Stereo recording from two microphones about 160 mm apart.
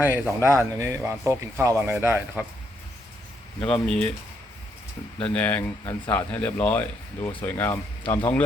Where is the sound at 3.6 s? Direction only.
30° left (ahead or behind).